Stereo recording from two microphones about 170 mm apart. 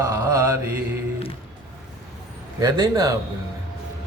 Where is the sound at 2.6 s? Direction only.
20° right (ahead or behind).